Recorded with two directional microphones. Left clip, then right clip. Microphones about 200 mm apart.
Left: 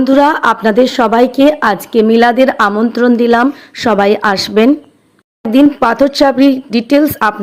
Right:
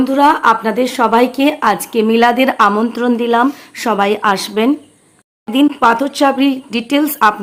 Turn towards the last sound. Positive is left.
turn(degrees=20)  # may be behind; listen again after turning